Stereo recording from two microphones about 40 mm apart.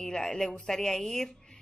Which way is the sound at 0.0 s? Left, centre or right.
Centre.